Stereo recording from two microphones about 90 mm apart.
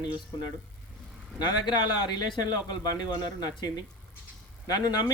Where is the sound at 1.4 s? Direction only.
55° left (ahead or behind).